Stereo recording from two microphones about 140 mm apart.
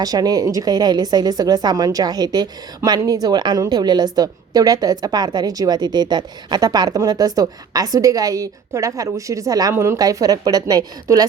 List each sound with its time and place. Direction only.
0.0 s a woman's voice: 25° right (ahead or behind)